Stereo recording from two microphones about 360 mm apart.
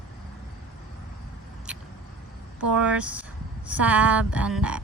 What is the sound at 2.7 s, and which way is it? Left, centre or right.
A woman's voice, centre.